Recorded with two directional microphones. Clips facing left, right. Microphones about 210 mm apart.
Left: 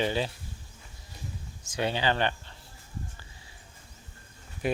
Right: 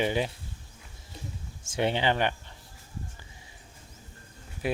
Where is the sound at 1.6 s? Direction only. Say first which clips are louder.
Right 2 dB; 25° right (ahead or behind).